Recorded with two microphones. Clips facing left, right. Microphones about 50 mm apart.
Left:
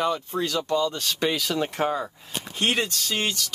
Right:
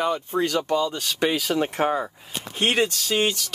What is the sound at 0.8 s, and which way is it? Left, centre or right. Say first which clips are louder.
Speech: right 1 dB; centre.